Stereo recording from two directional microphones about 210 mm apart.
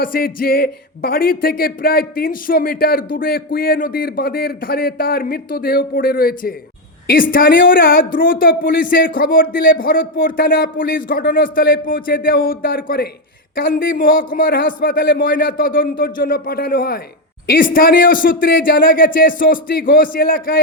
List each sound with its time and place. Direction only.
0.0 s speech: 45° left (ahead or behind)